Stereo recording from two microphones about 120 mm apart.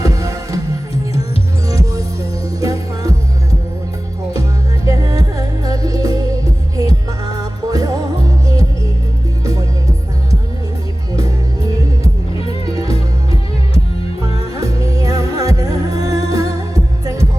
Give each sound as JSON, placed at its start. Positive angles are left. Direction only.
{"t": 0.0, "sound": "music", "side_deg": -25}
{"t": 1.6, "sound": "music", "side_deg": -25}
{"t": 4.9, "sound": "music", "side_deg": -30}
{"t": 9.4, "sound": "music", "side_deg": -30}
{"t": 12.3, "sound": "music", "side_deg": 50}
{"t": 14.6, "sound": "music", "side_deg": -30}